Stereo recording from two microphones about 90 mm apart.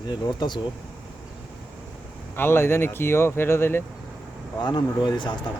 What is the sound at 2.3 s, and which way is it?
Speech, 25° left (ahead or behind).